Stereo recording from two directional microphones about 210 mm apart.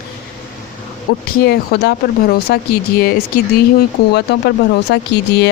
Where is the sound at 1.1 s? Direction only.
45° left (ahead or behind).